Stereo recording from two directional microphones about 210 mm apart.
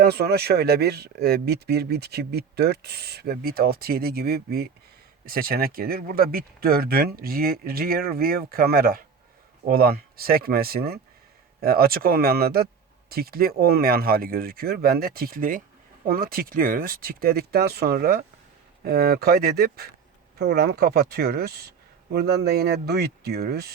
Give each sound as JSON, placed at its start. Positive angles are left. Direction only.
{"t": 0.0, "sound": "speech", "side_deg": -50}